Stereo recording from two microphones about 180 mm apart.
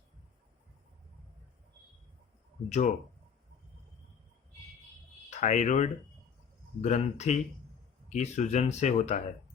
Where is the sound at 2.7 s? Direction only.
45° left (ahead or behind).